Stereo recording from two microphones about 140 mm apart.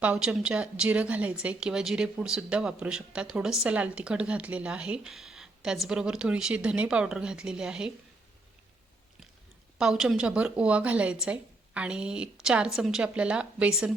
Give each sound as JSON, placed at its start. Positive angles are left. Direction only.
{"t": 0.0, "sound": "a woman's voice", "side_deg": -10}
{"t": 9.7, "sound": "a woman's voice", "side_deg": -5}